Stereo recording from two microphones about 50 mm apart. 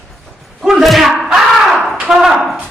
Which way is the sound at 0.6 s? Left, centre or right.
Centre.